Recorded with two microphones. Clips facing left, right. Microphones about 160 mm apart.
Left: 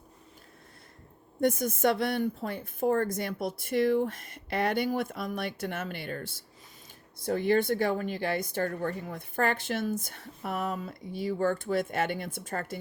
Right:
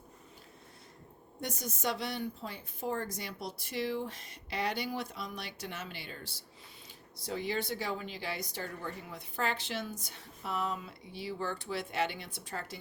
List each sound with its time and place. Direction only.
1.4 s a woman's voice: 55° left (ahead or behind)